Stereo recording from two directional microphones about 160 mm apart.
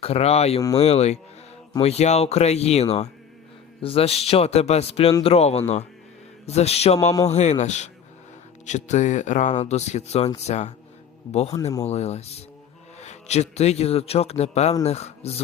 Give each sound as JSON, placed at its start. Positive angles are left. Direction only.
{"t": 0.0, "sound": "a man's voice", "side_deg": 40}
{"t": 11.9, "sound": "a man's voice", "side_deg": 40}